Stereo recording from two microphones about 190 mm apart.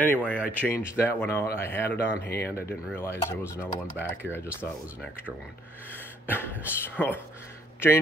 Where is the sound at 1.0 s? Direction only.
10° left (ahead or behind).